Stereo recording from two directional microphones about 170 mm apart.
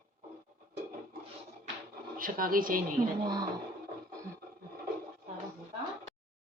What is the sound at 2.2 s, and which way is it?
Speech, 55° right (ahead or behind).